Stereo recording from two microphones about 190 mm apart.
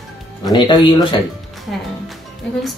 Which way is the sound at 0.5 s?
25° left (ahead or behind).